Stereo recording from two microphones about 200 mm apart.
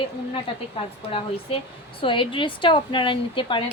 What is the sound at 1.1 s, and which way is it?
Speech, 25° left (ahead or behind).